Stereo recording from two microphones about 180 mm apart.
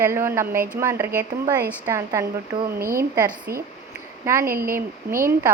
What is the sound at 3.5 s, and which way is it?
Speech, 60° right (ahead or behind).